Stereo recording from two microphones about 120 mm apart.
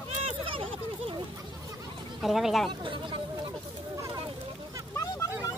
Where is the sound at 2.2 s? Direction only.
Centre (ahead or behind).